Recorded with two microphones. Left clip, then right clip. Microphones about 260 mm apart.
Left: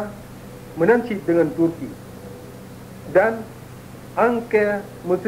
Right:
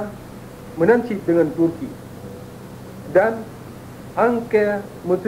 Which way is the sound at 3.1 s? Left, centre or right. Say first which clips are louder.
Right 1 dB; right.